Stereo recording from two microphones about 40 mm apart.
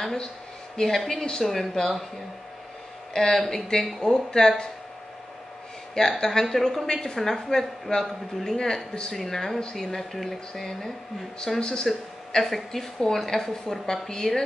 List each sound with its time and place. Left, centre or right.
0.7 s speech: centre
3.1 s speech: centre
5.9 s speech: centre
12.4 s speech: centre